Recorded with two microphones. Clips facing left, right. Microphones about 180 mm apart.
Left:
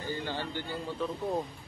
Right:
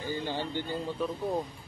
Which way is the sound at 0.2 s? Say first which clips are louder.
Right 2 dB; 15° right (ahead or behind).